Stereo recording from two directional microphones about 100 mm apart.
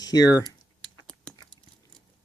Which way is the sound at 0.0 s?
40° left (ahead or behind).